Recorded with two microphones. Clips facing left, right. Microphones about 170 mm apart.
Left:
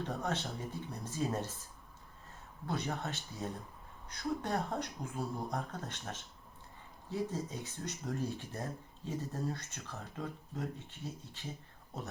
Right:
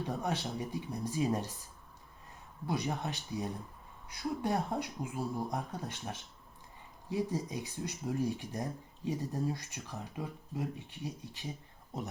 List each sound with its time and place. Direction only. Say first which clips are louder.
0.0 s speech: right 2 dB; 10° right (ahead or behind)
2.6 s speech: right 2 dB; 15° right (ahead or behind)